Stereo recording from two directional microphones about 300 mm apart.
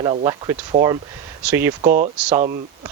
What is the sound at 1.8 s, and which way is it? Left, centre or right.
Speech, right.